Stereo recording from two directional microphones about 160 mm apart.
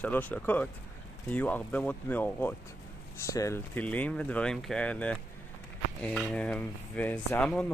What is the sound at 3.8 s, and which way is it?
Speech, 10° left (ahead or behind).